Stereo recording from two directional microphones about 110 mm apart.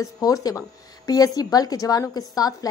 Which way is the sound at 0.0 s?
35° left (ahead or behind).